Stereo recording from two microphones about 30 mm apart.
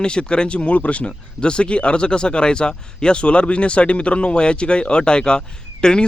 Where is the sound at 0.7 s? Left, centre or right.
Left.